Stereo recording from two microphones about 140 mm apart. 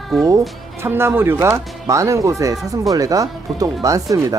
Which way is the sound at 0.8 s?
15° right (ahead or behind).